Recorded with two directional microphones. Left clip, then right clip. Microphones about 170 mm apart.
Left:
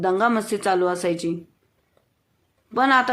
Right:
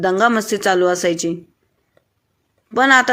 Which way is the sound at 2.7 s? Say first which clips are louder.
Right 5 dB; 20° right (ahead or behind).